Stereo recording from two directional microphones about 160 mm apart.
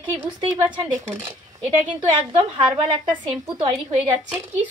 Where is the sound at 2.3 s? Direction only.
30° right (ahead or behind).